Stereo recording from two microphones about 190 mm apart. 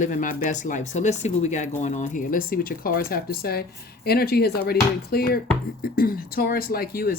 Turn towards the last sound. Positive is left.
turn(degrees=50)  # may be behind; listen again after turning